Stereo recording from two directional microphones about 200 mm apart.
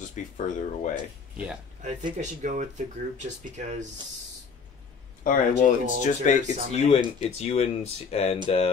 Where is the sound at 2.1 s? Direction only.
40° right (ahead or behind).